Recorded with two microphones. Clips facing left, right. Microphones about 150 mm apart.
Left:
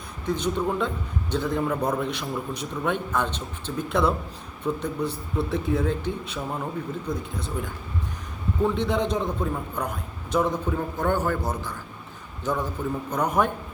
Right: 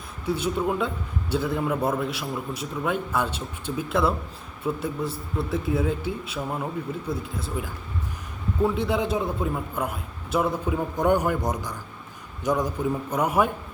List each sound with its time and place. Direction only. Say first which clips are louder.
0.3 s a man's voice: even; 5° right (ahead or behind)